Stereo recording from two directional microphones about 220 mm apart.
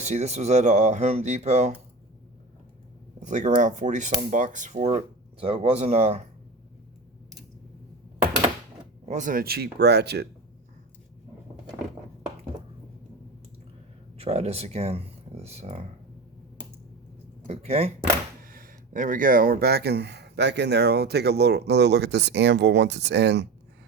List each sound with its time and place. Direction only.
0.0 s speech: 30° right (ahead or behind)
3.2 s speech: 35° right (ahead or behind)
9.0 s speech: 35° right (ahead or behind)
14.2 s speech: 30° right (ahead or behind)
17.4 s speech: 30° right (ahead or behind)
18.4 s speech: 40° right (ahead or behind)